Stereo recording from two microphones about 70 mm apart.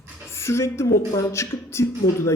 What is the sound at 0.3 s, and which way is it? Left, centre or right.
Speech, left.